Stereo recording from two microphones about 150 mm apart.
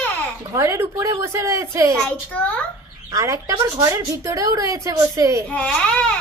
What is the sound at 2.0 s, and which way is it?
Speech, 10° left (ahead or behind).